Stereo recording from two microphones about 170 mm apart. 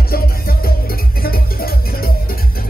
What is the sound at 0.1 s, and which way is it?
Music, 60° left (ahead or behind).